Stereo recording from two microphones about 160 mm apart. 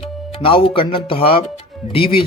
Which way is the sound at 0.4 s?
35° left (ahead or behind).